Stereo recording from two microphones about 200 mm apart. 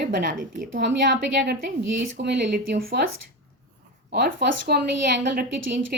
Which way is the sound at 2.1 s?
55° right (ahead or behind).